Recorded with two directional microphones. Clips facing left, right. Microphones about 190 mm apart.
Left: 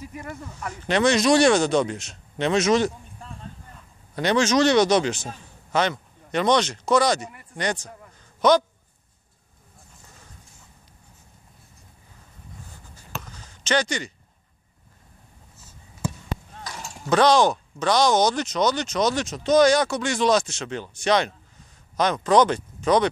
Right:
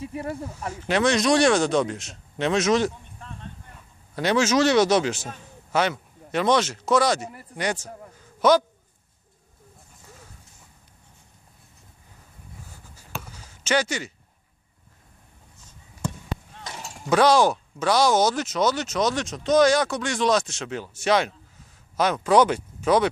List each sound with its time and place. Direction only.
0.0 s speech: 30° right (ahead or behind)
0.8 s speech: centre (ahead or behind)
4.1 s speech: 5° right (ahead or behind)
8.2 s a sound: 5° right (ahead or behind)
12.9 s basketball bounce: 10° right (ahead or behind)
15.5 s fireworks: 5° left (ahead or behind)
17.0 s speech: 10° right (ahead or behind)